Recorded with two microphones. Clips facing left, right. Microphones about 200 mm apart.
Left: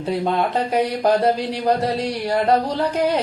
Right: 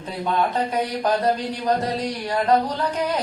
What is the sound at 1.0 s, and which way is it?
Speech, 30° left (ahead or behind).